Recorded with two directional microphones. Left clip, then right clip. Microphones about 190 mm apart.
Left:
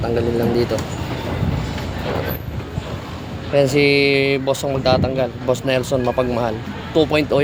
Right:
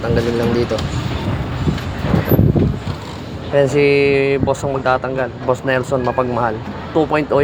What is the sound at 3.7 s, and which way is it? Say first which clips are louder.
Speech: right 2 dB; 25° left (ahead or behind).